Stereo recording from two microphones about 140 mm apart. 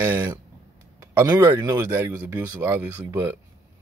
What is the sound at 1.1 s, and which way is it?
Speech, 20° right (ahead or behind).